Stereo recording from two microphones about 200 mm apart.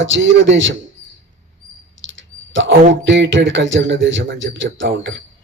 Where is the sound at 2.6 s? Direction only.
60° right (ahead or behind).